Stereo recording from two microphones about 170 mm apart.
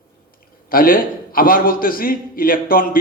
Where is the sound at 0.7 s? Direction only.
55° left (ahead or behind).